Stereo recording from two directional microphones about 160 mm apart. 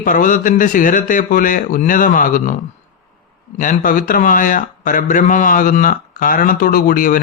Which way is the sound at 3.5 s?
55° left (ahead or behind).